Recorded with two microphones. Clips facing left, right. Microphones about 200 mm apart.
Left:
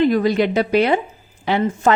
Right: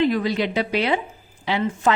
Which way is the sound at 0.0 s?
45° left (ahead or behind).